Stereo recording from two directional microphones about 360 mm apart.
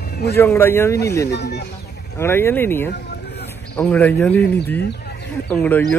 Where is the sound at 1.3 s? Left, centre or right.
Left.